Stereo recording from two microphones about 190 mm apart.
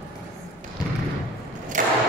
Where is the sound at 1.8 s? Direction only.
45° right (ahead or behind).